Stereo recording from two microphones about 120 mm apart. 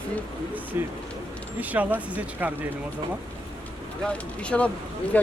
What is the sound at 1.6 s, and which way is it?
Speech, 15° right (ahead or behind).